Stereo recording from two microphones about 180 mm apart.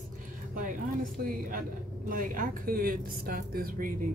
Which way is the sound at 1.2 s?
50° right (ahead or behind).